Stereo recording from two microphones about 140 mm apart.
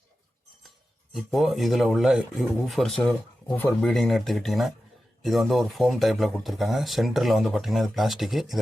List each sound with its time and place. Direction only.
1.1 s speech: centre (ahead or behind)